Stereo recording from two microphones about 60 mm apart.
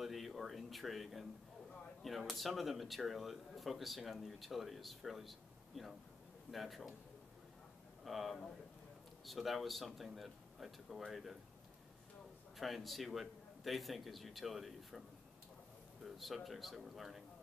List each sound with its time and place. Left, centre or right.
0.0 s a man's voice: centre
8.0 s a man's voice: centre
12.5 s a man's voice: centre